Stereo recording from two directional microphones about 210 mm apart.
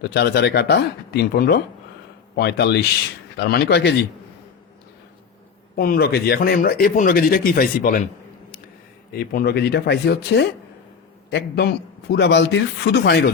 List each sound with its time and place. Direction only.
0.1 s speech: 50° left (ahead or behind)
5.7 s speech: 45° left (ahead or behind)
9.1 s speech: 50° left (ahead or behind)